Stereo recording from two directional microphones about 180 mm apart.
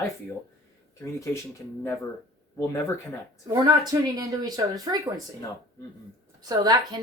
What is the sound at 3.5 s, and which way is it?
Speech, 20° right (ahead or behind).